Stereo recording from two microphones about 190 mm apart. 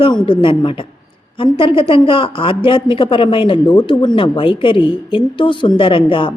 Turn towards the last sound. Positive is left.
turn(degrees=25)  # may be behind; listen again after turning